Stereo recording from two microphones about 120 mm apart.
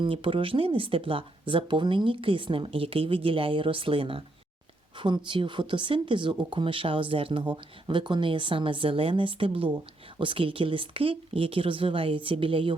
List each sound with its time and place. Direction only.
0.0 s speech: 45° right (ahead or behind)